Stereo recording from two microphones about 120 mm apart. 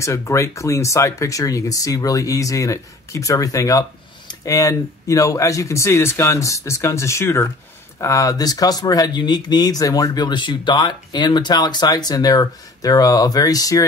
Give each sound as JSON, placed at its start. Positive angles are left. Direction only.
{"t": 0.0, "sound": "speech", "side_deg": 25}